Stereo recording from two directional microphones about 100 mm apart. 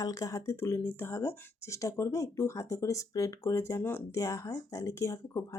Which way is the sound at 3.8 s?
20° left (ahead or behind).